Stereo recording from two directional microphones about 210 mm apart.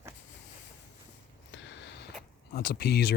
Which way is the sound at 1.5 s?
60° left (ahead or behind).